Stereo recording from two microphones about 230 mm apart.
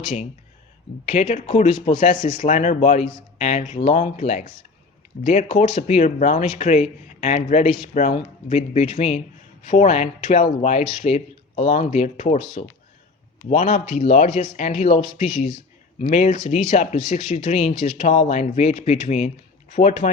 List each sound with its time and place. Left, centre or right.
1.0 s speech: left